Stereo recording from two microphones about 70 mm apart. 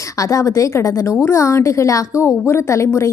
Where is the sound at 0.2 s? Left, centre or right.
Left.